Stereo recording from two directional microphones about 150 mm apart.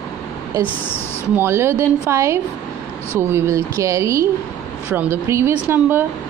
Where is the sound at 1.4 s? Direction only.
20° right (ahead or behind).